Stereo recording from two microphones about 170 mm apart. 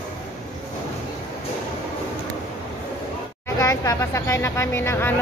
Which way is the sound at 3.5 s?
15° left (ahead or behind).